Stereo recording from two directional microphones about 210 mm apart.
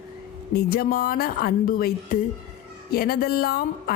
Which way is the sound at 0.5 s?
45° left (ahead or behind).